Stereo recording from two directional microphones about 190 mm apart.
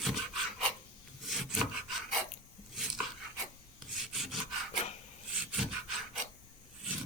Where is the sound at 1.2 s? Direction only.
Centre (ahead or behind).